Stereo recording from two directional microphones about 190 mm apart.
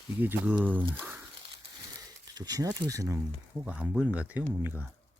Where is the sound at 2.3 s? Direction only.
20° right (ahead or behind).